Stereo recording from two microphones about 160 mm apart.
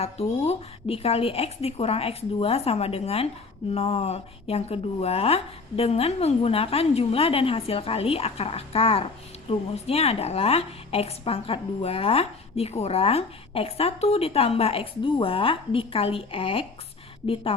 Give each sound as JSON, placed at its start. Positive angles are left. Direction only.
{"t": 0.0, "sound": "a woman's voice", "side_deg": 40}